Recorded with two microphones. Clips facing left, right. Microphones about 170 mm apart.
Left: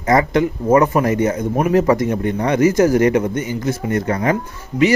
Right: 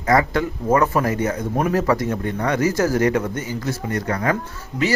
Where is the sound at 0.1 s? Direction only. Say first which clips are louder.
Left 3 dB; 20° left (ahead or behind).